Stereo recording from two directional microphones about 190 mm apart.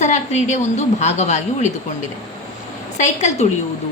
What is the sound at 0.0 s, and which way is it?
A woman's voice, 35° left (ahead or behind).